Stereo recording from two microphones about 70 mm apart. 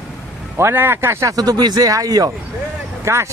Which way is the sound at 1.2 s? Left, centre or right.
Right.